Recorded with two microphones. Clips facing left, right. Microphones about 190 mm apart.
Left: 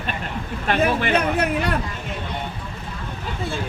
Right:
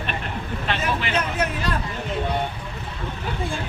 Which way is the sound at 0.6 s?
50° left (ahead or behind).